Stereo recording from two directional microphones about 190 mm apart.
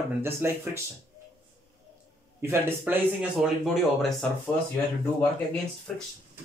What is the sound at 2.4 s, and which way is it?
Speech, 10° right (ahead or behind).